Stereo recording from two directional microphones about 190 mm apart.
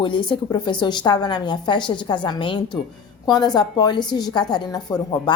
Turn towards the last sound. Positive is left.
turn(degrees=20)  # may be behind; listen again after turning